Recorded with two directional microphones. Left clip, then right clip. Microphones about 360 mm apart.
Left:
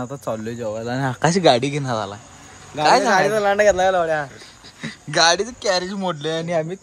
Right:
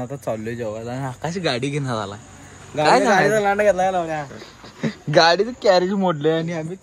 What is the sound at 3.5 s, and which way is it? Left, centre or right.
Speech, left.